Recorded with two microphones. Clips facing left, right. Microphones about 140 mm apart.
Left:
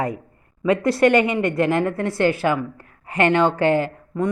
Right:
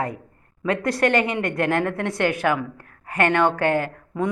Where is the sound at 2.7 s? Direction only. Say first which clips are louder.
Even; 50° right (ahead or behind).